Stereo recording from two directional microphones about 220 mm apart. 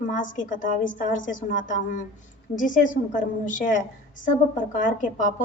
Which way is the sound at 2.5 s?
35° left (ahead or behind).